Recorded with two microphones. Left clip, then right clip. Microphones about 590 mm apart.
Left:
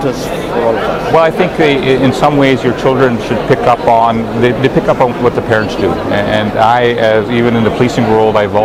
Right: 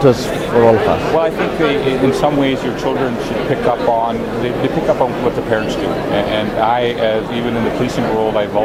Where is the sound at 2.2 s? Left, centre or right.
Left.